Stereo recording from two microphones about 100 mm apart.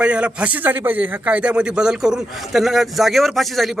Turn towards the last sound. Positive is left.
turn(degrees=0)  # may be behind; listen again after turning